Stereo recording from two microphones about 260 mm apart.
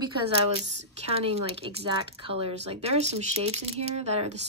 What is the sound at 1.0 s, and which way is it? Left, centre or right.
Speech, right.